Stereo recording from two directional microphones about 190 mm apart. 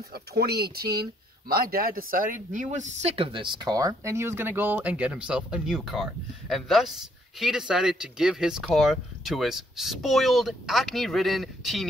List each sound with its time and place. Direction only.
0.1 s speech: 55° right (ahead or behind); by 11.9 s centre (ahead or behind)